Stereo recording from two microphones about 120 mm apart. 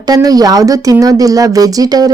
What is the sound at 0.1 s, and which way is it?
Speech, 30° right (ahead or behind).